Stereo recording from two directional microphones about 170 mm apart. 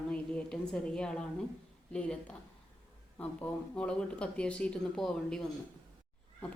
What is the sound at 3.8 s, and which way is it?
A woman's voice, 5° left (ahead or behind).